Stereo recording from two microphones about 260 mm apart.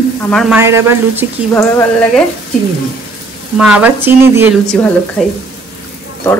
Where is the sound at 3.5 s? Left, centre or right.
Centre.